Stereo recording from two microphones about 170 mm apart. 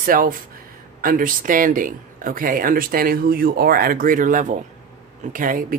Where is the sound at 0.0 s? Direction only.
55° right (ahead or behind).